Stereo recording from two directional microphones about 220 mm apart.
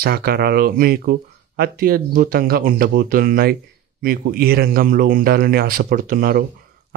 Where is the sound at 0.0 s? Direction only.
45° right (ahead or behind).